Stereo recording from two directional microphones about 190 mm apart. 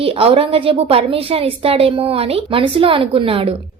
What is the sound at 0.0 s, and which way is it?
A woman's voice, 30° right (ahead or behind).